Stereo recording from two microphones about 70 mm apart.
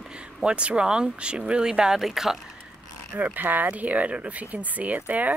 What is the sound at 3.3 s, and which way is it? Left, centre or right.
Speech, right.